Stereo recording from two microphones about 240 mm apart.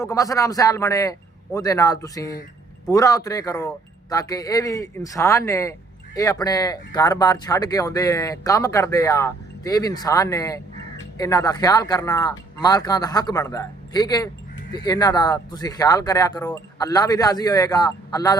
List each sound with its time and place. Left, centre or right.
0.0 s speech: centre